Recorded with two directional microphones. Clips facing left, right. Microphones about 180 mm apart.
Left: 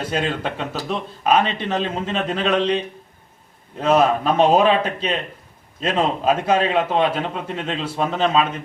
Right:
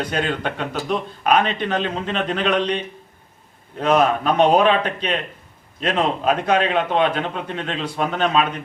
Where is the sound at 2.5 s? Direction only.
30° left (ahead or behind).